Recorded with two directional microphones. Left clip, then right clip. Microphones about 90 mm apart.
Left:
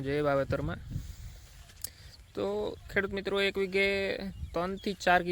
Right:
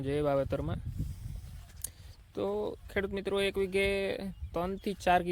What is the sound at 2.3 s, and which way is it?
Speech, 30° right (ahead or behind).